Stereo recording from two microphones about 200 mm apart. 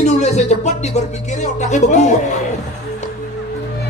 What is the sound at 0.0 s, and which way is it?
Music, 35° left (ahead or behind).